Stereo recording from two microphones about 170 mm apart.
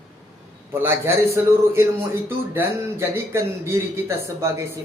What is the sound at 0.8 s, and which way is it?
Speech, 15° right (ahead or behind).